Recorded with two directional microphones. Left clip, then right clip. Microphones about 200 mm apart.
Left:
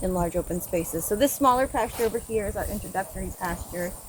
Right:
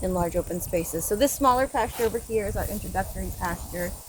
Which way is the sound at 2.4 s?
15° right (ahead or behind).